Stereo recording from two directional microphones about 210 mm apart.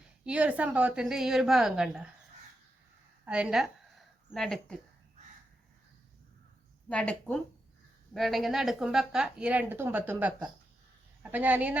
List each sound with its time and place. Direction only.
0.3 s a woman's voice: 5° right (ahead or behind)
3.2 s speech: 5° right (ahead or behind)
6.8 s a woman's voice: 5° left (ahead or behind)